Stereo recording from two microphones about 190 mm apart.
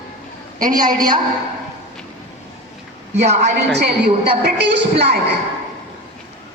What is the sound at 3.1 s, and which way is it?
Speech, 35° right (ahead or behind).